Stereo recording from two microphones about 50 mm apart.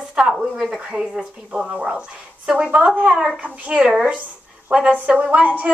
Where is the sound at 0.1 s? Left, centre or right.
Centre.